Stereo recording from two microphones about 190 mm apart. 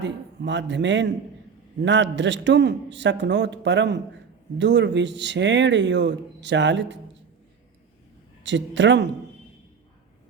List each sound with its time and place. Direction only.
0.0 s a man's voice: 70° right (ahead or behind)
8.4 s speech: 70° right (ahead or behind)